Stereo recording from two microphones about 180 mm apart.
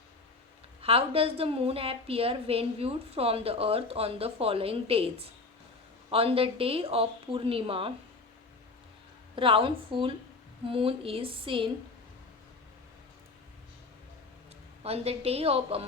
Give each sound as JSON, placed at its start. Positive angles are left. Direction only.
{"t": 0.8, "sound": "a woman's voice", "side_deg": -30}
{"t": 9.3, "sound": "a woman's voice", "side_deg": -30}
{"t": 14.8, "sound": "a woman's voice", "side_deg": -35}